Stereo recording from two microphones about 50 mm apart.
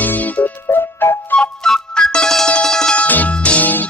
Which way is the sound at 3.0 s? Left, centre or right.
Left.